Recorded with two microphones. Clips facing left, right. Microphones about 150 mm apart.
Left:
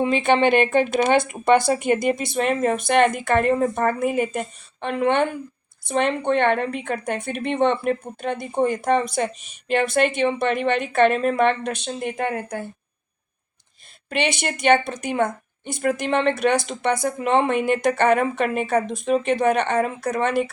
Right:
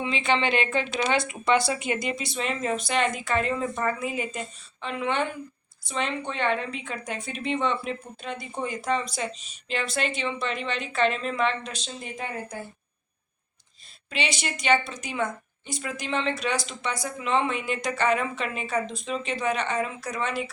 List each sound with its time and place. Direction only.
0.0 s a woman's voice: 50° left (ahead or behind)
14.1 s a woman's voice: 55° left (ahead or behind)